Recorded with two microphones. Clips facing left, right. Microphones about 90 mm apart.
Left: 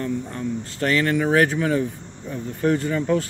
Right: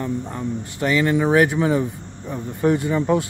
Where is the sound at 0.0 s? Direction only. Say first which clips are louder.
Right 1 dB; 20° right (ahead or behind).